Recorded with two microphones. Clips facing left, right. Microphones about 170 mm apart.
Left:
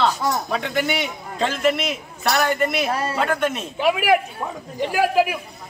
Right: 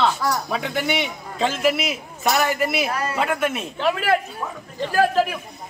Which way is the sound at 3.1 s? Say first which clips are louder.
Left 1 dB; 5° right (ahead or behind).